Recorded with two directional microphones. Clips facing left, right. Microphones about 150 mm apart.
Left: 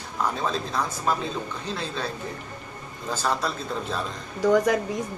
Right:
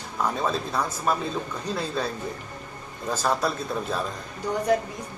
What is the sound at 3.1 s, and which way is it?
Speech, 5° right (ahead or behind).